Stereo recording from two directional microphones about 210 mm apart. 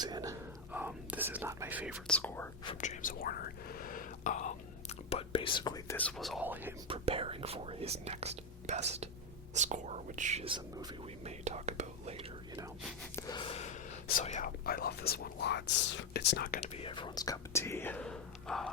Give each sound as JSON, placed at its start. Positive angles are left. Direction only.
{"t": 0.0, "sound": "whispering", "side_deg": -20}
{"t": 0.7, "sound": "whispering", "side_deg": -10}
{"t": 2.0, "sound": "speech", "side_deg": 5}
{"t": 2.8, "sound": "whispering", "side_deg": 35}
{"t": 6.0, "sound": "speech", "side_deg": 5}
{"t": 6.8, "sound": "speech", "side_deg": -25}
{"t": 13.1, "sound": "a sound", "side_deg": 20}
{"t": 14.2, "sound": "speech", "side_deg": 35}
{"t": 16.7, "sound": "speech", "side_deg": 25}